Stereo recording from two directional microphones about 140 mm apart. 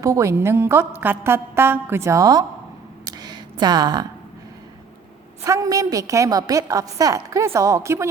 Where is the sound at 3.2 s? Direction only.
30° right (ahead or behind).